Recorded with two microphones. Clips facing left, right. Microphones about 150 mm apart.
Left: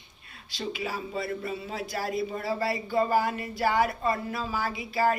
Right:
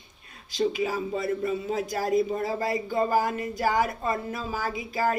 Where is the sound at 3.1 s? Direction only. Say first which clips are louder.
Right 1 dB; 40° right (ahead or behind).